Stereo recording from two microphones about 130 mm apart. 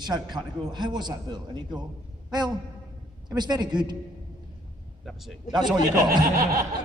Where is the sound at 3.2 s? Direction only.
35° right (ahead or behind).